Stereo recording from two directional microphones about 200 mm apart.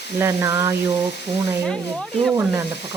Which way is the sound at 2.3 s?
15° right (ahead or behind).